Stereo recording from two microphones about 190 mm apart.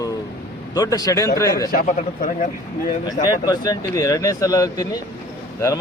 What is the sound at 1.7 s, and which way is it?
Speech, 45° left (ahead or behind).